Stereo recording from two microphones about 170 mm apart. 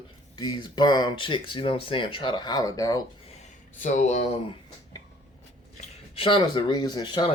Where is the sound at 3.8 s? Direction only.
45° left (ahead or behind).